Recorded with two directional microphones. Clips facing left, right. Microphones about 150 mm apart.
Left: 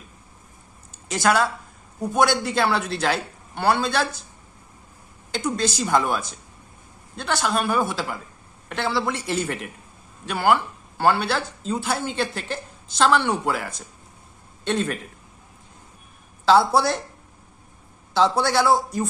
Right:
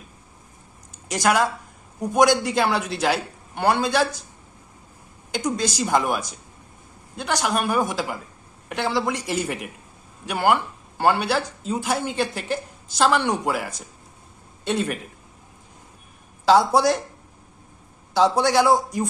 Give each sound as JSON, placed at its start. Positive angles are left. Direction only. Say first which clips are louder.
{"t": 0.9, "sound": "a sound", "louder": "even", "side_deg": -15}
{"t": 2.0, "sound": "speech", "louder": "right 3 dB", "side_deg": -15}
{"t": 5.3, "sound": "speech", "louder": "even", "side_deg": -10}
{"t": 16.5, "sound": "speech", "louder": "right 1 dB", "side_deg": -15}
{"t": 18.1, "sound": "speech", "louder": "right 2 dB", "side_deg": -15}